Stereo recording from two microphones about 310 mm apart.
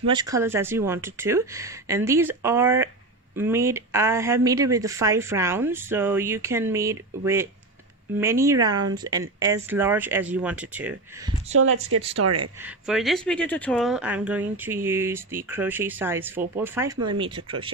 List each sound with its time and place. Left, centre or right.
0.1 s speech: centre
11.5 s speech: right
12.2 s speech: right
12.6 s speech: centre